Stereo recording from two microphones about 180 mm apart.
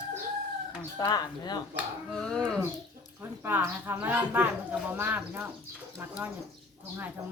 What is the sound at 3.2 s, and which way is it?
Speech, 10° right (ahead or behind).